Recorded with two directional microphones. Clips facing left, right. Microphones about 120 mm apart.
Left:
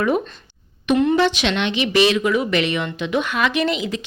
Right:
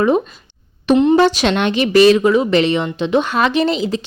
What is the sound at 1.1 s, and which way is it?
Speech, 40° right (ahead or behind).